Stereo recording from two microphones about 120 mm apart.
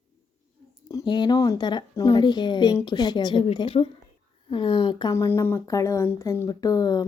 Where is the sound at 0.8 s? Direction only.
35° left (ahead or behind).